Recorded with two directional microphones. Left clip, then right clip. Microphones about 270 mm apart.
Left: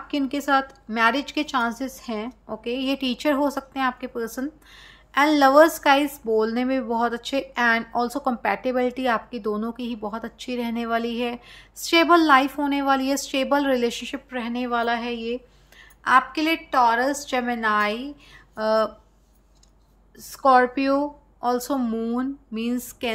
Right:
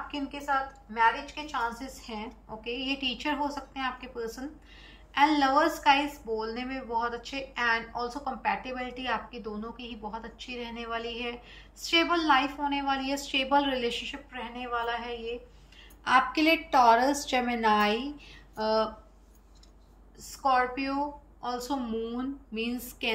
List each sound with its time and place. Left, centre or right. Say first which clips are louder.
0.9 s speech: left 5 dB; left
16.0 s a woman's voice: left 5 dB; centre
20.2 s a woman's voice: left 9 dB; centre